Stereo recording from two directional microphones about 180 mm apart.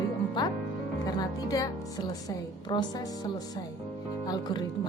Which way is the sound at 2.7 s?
25° left (ahead or behind).